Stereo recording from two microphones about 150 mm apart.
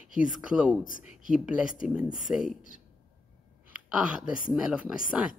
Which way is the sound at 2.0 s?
65° left (ahead or behind).